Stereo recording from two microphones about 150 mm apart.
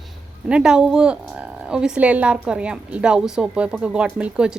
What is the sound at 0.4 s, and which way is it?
Speech, 5° right (ahead or behind).